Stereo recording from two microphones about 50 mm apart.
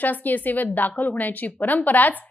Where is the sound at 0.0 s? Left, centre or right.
Left.